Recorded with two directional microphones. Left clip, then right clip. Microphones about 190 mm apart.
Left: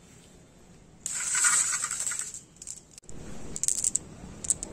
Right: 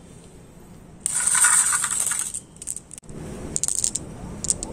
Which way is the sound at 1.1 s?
20° right (ahead or behind).